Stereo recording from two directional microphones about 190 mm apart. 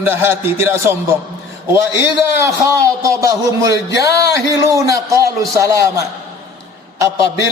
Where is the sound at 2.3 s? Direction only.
15° right (ahead or behind).